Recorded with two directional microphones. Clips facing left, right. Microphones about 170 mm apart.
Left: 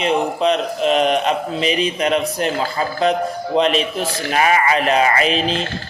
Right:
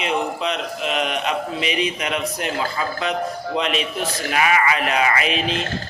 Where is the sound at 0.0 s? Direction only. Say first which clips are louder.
Left 5 dB; 35° left (ahead or behind).